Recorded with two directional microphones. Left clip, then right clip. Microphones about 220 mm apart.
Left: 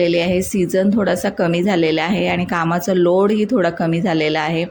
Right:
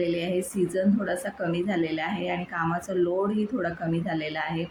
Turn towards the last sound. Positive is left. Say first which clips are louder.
# left 12 dB
turn(degrees=40)  # may be behind; listen again after turning